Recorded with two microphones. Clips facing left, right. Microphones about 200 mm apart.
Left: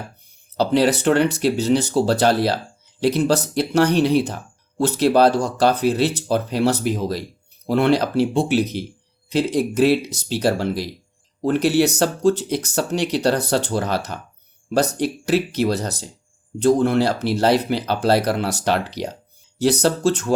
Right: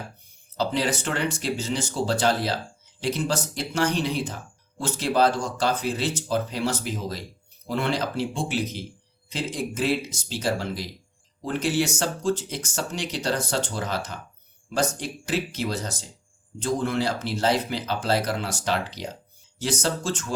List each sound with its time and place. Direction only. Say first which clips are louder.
0.5 s speech: left 8 dB; 65° left (ahead or behind)